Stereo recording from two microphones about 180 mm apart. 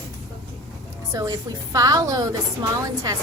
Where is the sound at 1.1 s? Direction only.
20° right (ahead or behind).